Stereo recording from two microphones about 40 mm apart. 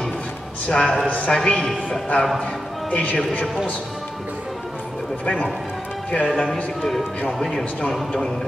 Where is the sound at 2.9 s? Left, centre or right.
Left.